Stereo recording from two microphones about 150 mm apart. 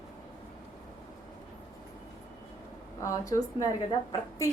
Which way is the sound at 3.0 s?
20° left (ahead or behind).